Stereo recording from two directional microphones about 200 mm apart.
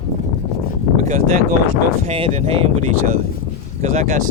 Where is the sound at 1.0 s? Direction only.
40° right (ahead or behind).